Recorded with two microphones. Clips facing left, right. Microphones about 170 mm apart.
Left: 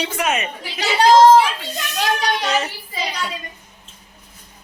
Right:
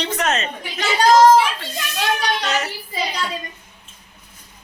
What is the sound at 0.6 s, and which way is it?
Speech, 35° left (ahead or behind).